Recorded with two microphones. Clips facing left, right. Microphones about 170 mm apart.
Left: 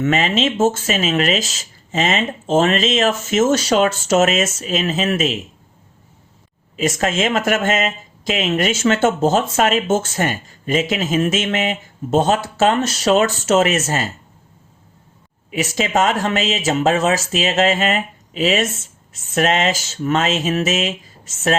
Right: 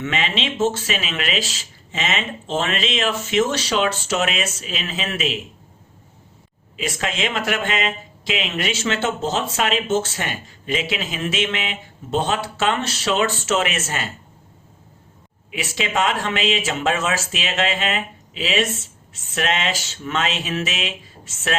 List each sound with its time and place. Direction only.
0.0 s speech: 45° left (ahead or behind)
6.7 s speech: 45° left (ahead or behind)
15.5 s speech: 40° left (ahead or behind)